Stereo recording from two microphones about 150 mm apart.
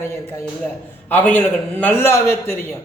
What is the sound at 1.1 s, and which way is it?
A man's voice, 10° left (ahead or behind).